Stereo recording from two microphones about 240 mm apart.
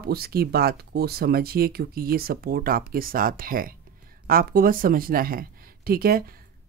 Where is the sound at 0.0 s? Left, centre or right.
Right.